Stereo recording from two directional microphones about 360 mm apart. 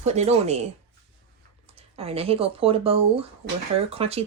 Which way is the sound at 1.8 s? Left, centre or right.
Centre.